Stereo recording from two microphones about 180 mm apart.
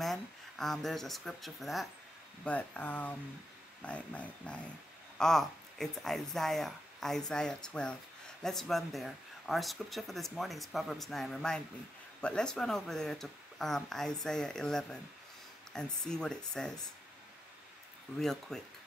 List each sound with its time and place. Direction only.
0.0 s speech: centre (ahead or behind)
18.2 s speech: centre (ahead or behind)